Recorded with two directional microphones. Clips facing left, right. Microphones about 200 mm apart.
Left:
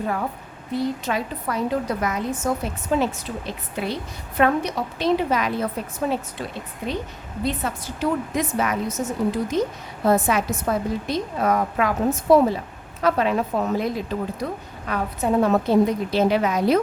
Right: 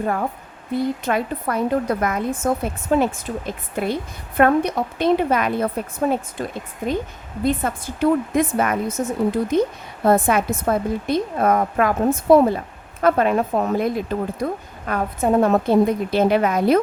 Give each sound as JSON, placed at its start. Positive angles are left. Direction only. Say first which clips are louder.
{"t": 0.7, "sound": "a woman's voice", "louder": "right 3 dB", "side_deg": -55}